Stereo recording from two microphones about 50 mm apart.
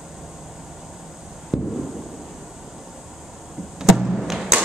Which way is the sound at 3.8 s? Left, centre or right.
Centre.